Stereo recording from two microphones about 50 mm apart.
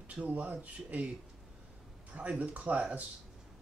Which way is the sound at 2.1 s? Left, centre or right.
Right.